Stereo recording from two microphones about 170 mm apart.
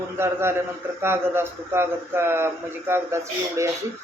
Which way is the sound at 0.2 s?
15° right (ahead or behind).